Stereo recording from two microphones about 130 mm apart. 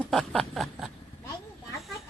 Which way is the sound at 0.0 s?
5° left (ahead or behind).